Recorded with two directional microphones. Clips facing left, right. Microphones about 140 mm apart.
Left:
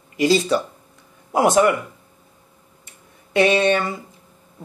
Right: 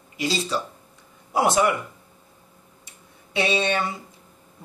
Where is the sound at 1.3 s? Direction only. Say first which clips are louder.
Left 4 dB; 50° left (ahead or behind).